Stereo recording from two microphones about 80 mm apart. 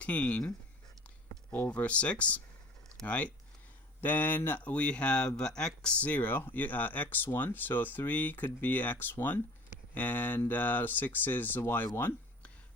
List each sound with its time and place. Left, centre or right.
0.0 s speech: centre